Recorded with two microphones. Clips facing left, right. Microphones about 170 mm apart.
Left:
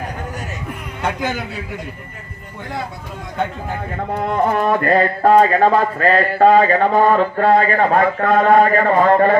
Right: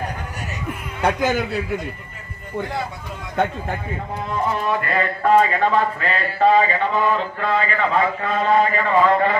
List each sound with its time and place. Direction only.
4.1 s speech: 55° left (ahead or behind)